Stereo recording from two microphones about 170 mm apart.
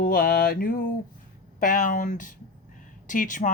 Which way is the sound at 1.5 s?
55° left (ahead or behind).